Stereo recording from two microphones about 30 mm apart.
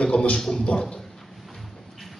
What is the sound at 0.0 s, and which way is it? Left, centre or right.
Speech, left.